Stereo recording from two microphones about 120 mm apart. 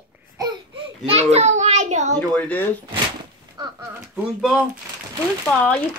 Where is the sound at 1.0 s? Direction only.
60° right (ahead or behind); by 2.1 s 80° right.